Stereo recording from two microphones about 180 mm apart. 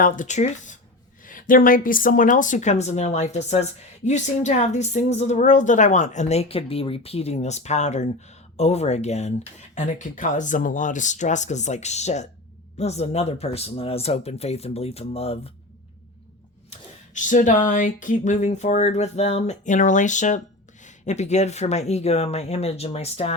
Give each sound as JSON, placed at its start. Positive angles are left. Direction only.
{"t": 0.0, "sound": "speech", "side_deg": 45}
{"t": 17.2, "sound": "speech", "side_deg": 45}